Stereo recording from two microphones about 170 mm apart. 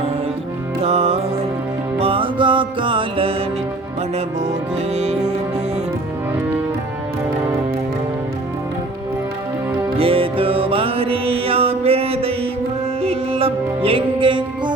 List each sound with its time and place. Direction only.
0.9 s music: 35° right (ahead or behind)
10.0 s music: 30° right (ahead or behind)